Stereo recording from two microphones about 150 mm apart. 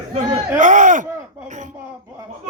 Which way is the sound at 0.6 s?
55° right (ahead or behind).